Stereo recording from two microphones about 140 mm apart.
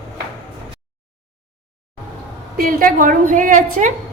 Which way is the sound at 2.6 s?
90° right.